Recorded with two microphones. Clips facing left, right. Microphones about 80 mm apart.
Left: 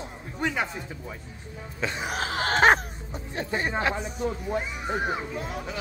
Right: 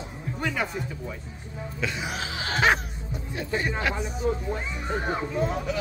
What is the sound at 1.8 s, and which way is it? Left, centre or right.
Speech, left.